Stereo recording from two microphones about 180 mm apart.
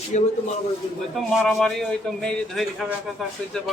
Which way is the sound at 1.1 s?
Centre (ahead or behind).